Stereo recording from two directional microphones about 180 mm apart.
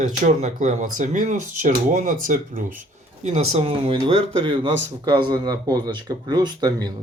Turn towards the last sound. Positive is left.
turn(degrees=-25)  # may be behind; listen again after turning